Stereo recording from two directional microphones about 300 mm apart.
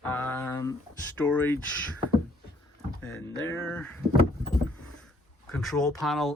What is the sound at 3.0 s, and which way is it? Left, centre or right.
Speech, left.